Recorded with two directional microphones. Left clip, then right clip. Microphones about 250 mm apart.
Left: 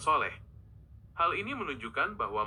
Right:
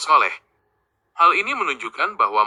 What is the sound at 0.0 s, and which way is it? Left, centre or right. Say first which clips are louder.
Speech: right 12 dB; right.